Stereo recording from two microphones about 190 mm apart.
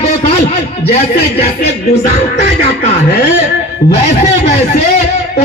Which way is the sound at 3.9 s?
30° left (ahead or behind).